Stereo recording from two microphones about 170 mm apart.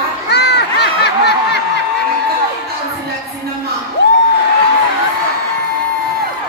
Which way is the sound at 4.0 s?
90° left.